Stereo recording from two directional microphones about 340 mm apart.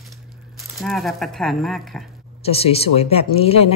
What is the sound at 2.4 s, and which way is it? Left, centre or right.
Speech, centre.